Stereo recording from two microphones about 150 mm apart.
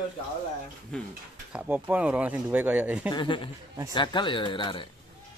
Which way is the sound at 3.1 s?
30° left (ahead or behind).